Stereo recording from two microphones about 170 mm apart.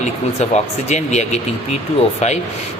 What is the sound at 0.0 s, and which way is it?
Speech, 40° left (ahead or behind).